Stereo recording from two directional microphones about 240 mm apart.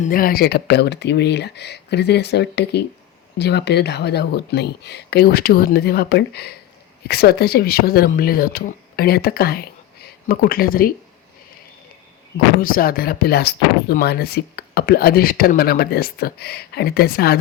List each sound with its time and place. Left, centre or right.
0.0 s speech: left
12.5 s speech: left